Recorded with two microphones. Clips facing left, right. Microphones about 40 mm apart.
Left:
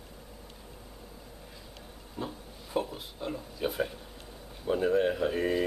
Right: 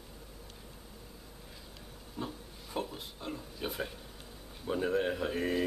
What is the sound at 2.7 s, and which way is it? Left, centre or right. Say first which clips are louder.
A man's voice: left 5 dB; centre.